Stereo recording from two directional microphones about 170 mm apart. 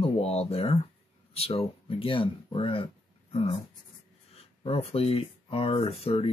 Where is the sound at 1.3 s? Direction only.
35° left (ahead or behind).